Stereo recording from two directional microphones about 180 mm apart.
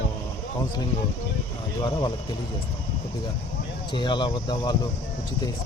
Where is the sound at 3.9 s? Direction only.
25° left (ahead or behind).